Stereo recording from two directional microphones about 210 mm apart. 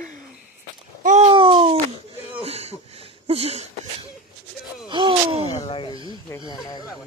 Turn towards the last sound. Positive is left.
turn(degrees=20)  # may be behind; listen again after turning